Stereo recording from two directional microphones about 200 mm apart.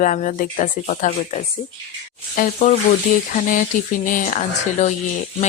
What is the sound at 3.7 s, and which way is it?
Speech, 40° left (ahead or behind).